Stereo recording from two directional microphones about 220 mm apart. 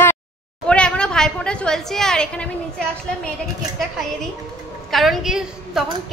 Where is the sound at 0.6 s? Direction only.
5° left (ahead or behind).